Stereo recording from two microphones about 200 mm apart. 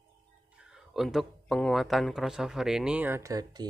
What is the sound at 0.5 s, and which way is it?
Speech, 5° right (ahead or behind).